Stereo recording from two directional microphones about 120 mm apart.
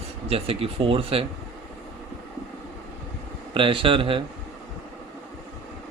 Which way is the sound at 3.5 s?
45° right (ahead or behind).